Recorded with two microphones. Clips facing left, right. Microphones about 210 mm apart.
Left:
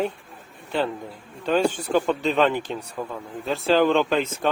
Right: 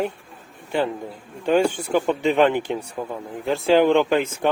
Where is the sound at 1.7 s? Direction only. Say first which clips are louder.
Right 1 dB; 10° right (ahead or behind).